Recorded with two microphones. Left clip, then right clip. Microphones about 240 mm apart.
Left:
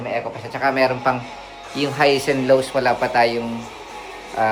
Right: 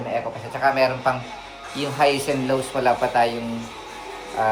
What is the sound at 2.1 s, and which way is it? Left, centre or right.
Speech, centre.